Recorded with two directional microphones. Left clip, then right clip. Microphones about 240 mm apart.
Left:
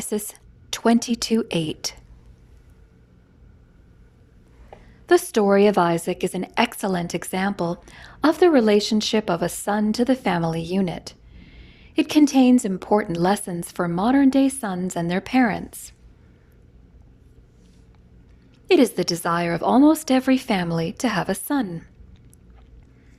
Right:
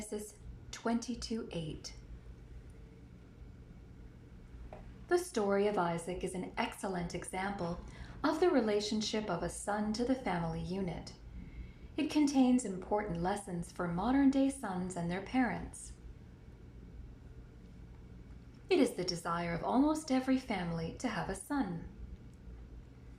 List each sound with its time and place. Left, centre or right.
0.0 s a woman's voice: left
5.0 s a woman's voice: left
18.7 s a woman's voice: left